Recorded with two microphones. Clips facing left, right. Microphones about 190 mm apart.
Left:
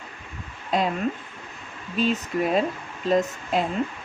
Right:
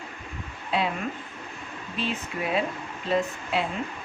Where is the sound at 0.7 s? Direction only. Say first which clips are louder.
Left 3 dB; 40° left (ahead or behind).